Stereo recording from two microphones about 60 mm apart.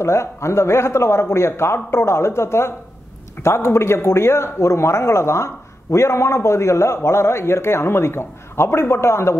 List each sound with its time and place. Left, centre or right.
0.0 s a man's voice: left